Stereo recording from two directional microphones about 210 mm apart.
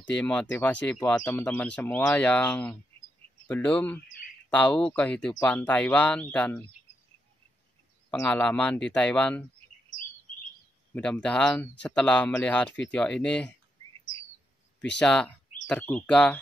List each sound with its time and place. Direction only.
0.1 s speech: 5° left (ahead or behind)
8.1 s speech: 5° left (ahead or behind)
11.0 s speech: 5° left (ahead or behind)
15.0 s speech: 5° left (ahead or behind)